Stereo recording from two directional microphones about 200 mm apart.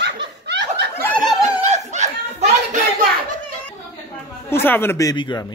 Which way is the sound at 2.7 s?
40° right (ahead or behind).